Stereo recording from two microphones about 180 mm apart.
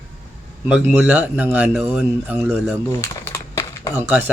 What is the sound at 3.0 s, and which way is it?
Crumpling, 15° left (ahead or behind).